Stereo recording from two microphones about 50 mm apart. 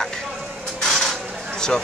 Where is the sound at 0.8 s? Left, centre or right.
Centre.